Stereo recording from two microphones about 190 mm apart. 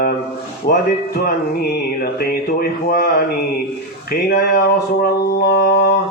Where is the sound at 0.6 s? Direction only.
55° left (ahead or behind).